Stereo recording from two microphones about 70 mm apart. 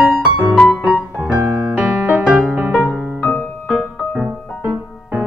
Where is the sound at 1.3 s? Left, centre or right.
Right.